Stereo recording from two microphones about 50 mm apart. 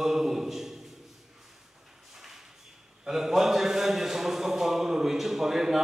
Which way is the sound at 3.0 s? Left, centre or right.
Centre.